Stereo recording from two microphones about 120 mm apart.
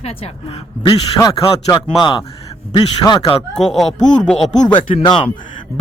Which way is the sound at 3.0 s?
30° left (ahead or behind).